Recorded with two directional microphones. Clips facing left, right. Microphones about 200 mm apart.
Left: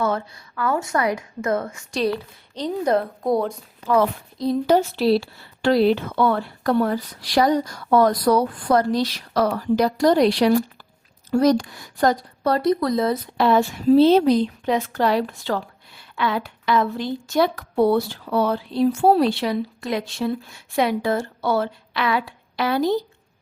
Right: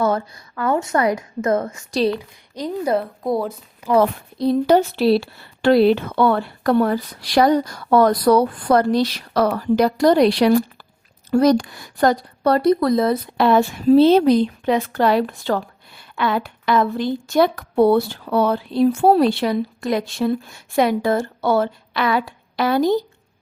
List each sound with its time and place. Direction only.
0.0 s speech: 35° right (ahead or behind)
0.8 s a woman's voice: 25° right (ahead or behind)
1.5 s a woman's voice: 40° right (ahead or behind)
2.1 s speech: 10° right (ahead or behind)
4.0 s a woman's voice: 65° right (ahead or behind); by 23.0 s 45° right (ahead or behind)